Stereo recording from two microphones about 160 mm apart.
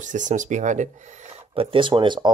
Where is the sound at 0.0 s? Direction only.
50° right (ahead or behind).